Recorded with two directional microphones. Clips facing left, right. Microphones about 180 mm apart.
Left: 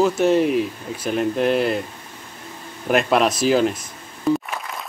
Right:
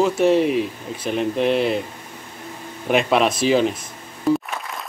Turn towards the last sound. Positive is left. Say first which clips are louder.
# right 1 dB
turn(degrees=0)  # may be behind; listen again after turning